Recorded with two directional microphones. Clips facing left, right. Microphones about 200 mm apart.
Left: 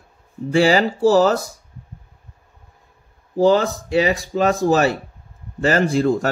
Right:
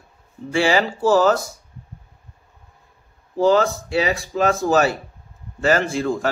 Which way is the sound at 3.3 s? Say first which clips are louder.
Left 1 dB; 30° left (ahead or behind).